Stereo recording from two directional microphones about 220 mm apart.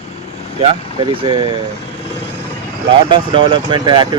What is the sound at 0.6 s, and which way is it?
Speech, 25° right (ahead or behind).